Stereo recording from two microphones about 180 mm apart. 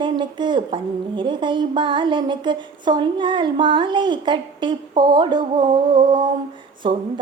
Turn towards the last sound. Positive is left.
turn(degrees=-30)  # may be behind; listen again after turning